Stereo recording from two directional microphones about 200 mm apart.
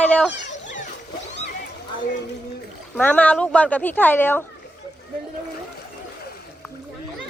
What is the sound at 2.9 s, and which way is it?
Speech, 5° left (ahead or behind).